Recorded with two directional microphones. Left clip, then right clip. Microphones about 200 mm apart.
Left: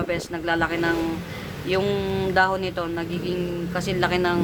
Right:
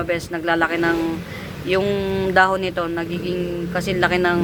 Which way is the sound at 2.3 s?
20° right (ahead or behind).